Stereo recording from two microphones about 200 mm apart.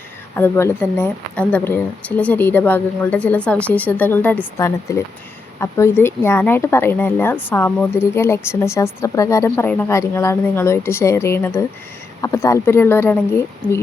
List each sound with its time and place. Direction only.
0.3 s speech: 10° left (ahead or behind)